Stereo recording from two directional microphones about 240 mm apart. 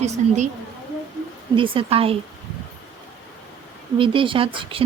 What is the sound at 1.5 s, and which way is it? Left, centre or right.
Speech, right.